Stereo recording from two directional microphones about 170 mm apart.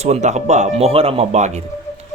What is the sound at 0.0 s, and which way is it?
Speech, 40° right (ahead or behind).